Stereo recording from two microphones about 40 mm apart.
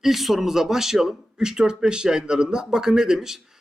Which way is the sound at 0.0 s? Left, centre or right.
Centre.